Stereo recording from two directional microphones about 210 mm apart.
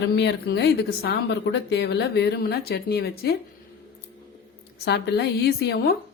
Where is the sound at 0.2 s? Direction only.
55° left (ahead or behind).